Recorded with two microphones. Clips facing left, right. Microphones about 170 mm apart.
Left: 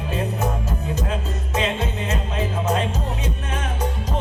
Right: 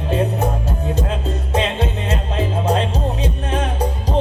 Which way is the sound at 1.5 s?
30° right (ahead or behind).